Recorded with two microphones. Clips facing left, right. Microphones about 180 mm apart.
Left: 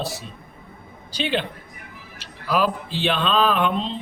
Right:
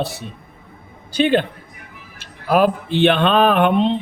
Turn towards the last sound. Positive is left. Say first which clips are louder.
# right 7 dB
turn(degrees=-65)  # may be behind; listen again after turning